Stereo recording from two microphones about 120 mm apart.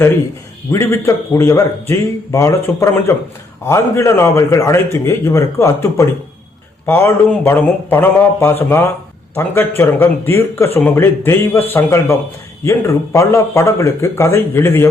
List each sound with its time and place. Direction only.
0.7 s a man's voice: 25° left (ahead or behind)